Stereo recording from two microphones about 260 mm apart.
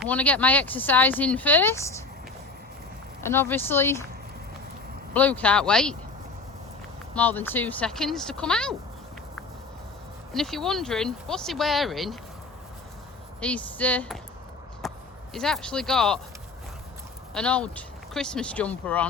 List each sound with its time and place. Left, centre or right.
0.0 s speech: centre
3.2 s speech: centre
5.1 s speech: centre
7.1 s speech: centre
10.3 s speech: centre
13.4 s speech: centre
17.3 s speech: centre